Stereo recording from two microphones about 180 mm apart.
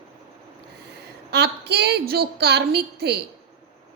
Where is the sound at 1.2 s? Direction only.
65° right (ahead or behind).